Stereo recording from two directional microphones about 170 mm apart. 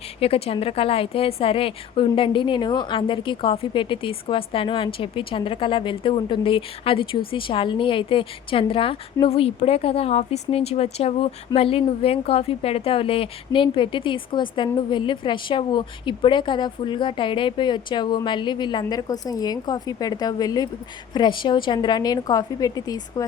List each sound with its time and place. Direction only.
0.2 s a woman's voice: 35° left (ahead or behind)